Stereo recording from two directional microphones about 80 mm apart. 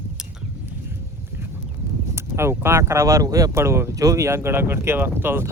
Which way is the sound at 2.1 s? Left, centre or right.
Right.